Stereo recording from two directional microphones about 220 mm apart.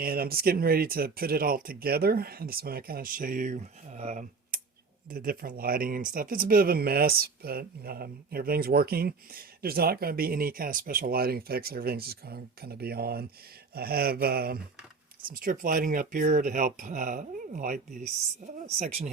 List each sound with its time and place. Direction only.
0.0 s speech: 45° right (ahead or behind)